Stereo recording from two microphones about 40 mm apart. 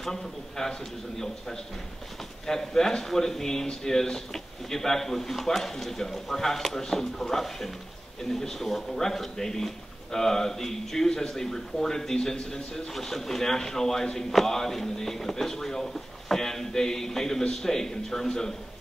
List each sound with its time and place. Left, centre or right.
0.0 s speech: centre
2.4 s speech: centre